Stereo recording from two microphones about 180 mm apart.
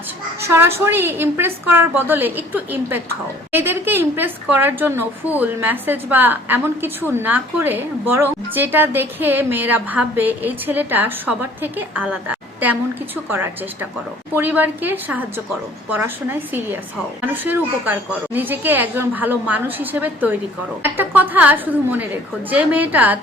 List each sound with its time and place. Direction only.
0.4 s a woman's voice: 15° right (ahead or behind)
14.3 s a woman's voice: 10° right (ahead or behind)